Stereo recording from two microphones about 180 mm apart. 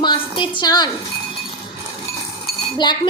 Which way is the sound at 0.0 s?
25° left (ahead or behind).